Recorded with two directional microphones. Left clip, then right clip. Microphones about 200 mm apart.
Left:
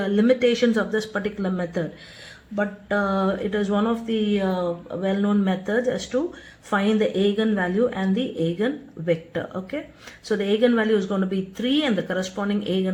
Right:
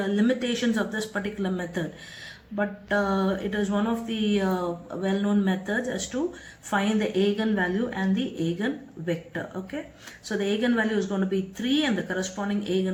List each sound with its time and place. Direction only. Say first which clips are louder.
0.0 s speech: left 7 dB; 40° left (ahead or behind)